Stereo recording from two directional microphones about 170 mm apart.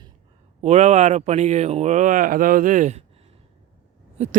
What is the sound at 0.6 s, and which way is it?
Speech, 40° right (ahead or behind).